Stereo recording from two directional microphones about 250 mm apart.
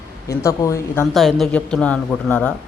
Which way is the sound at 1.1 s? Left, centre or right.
Centre.